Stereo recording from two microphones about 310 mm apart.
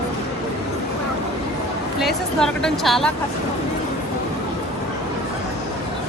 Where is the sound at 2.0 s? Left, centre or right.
Centre.